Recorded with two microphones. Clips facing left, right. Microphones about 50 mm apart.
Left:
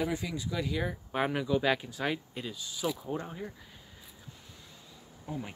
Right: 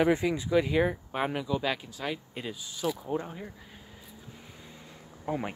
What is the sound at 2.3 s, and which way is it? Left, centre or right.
Speech, centre.